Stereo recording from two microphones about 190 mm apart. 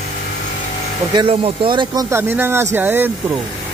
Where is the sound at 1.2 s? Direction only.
30° right (ahead or behind); by 3.1 s 10° right (ahead or behind).